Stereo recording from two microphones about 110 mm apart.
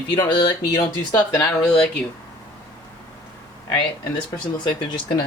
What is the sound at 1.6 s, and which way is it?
Speech, 10° left (ahead or behind).